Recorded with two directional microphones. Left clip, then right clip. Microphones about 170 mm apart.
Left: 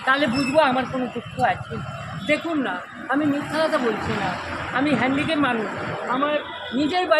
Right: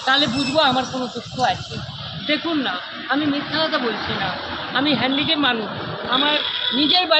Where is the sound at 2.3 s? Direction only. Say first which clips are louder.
Right 1 dB; 20° left (ahead or behind).